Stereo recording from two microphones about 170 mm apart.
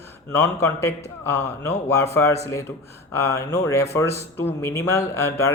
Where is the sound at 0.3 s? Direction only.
15° left (ahead or behind).